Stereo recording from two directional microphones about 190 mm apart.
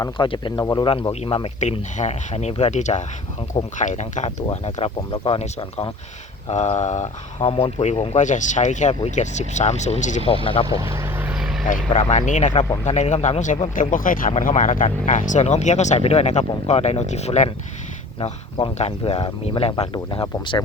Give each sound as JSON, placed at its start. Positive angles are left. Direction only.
{"t": 0.0, "sound": "speech", "side_deg": 25}
{"t": 10.7, "sound": "vehicle", "side_deg": -15}
{"t": 11.9, "sound": "speech", "side_deg": 35}